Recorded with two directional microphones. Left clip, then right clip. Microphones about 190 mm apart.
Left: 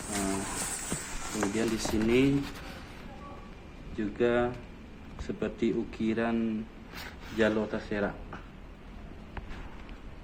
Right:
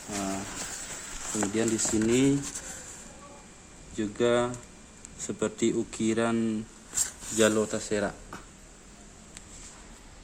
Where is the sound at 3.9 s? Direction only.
65° right (ahead or behind).